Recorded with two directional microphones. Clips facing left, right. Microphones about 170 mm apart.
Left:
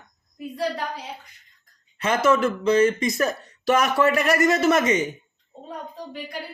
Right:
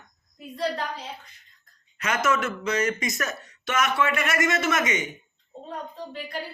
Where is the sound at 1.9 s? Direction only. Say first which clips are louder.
Left 5 dB; 30° left (ahead or behind).